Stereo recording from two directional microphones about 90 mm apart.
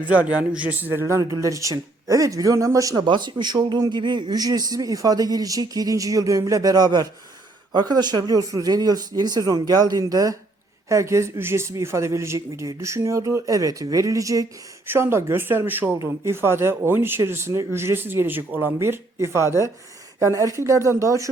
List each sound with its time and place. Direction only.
0.1 s a man's voice: 15° right (ahead or behind)
1.2 s speech: 40° right (ahead or behind)
3.0 s a man's voice: 55° right (ahead or behind); by 14.4 s 35° right (ahead or behind)
14.8 s speech: 25° right (ahead or behind)